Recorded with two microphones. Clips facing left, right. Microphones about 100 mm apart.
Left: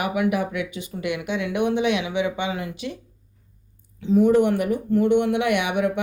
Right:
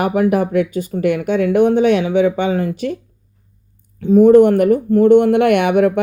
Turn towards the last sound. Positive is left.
turn(degrees=-50)  # may be behind; listen again after turning